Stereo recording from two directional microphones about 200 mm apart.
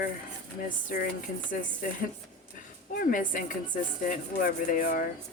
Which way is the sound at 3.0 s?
45° left (ahead or behind).